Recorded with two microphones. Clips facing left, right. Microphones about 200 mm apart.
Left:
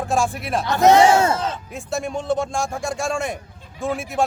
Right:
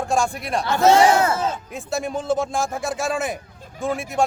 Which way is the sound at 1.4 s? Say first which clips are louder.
Right 2 dB; 5° right (ahead or behind).